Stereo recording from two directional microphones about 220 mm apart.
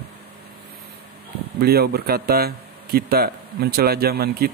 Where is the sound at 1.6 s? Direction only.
45° right (ahead or behind).